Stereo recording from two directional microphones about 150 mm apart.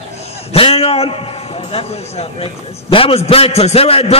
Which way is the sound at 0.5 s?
40° left (ahead or behind).